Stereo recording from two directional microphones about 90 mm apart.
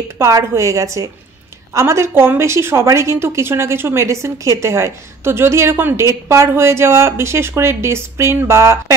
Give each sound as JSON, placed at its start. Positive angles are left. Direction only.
{"t": 0.2, "sound": "a woman's voice", "side_deg": -30}